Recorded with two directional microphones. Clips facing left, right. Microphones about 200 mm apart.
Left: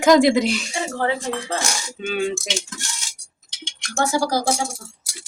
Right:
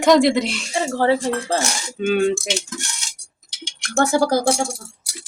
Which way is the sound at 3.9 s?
55° right (ahead or behind).